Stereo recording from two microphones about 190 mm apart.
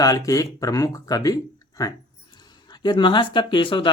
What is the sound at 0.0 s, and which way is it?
Speech, 20° left (ahead or behind).